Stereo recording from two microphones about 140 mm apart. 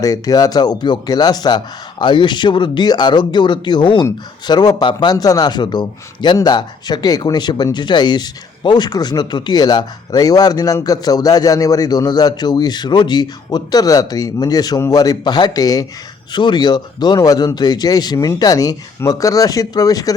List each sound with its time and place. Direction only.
0.0 s speech: 25° left (ahead or behind)